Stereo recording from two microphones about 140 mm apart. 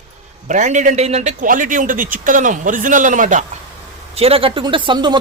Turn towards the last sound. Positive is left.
turn(degrees=-35)  # may be behind; listen again after turning